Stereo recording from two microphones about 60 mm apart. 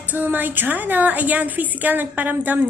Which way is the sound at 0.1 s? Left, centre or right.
Right.